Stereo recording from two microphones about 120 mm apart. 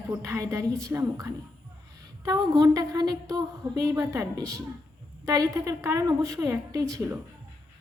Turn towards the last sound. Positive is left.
turn(degrees=-25)  # may be behind; listen again after turning